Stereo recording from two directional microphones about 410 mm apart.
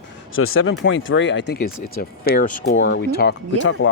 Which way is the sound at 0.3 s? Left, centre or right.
Left.